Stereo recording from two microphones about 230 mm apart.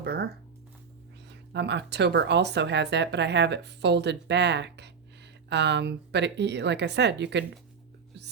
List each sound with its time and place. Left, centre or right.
0.0 s speech: right
1.3 s speech: right